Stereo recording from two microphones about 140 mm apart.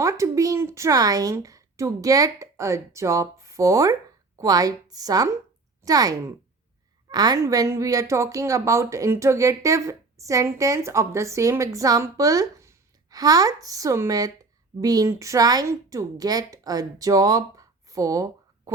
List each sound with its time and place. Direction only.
0.0 s a woman's voice: 20° right (ahead or behind)